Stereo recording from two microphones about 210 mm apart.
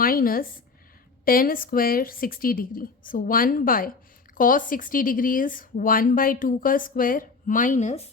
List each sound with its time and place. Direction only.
0.0 s a woman's voice: 45° left (ahead or behind)